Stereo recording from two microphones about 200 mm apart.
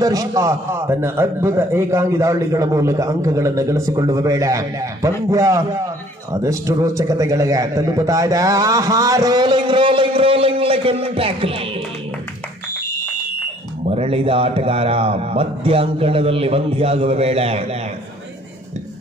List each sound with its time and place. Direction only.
0.0 s a man's voice: 15° right (ahead or behind)
13.8 s speech: 30° right (ahead or behind)